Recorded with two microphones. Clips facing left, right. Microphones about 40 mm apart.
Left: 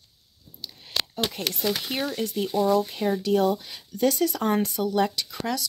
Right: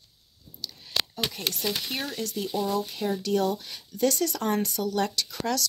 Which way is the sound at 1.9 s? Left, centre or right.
Centre.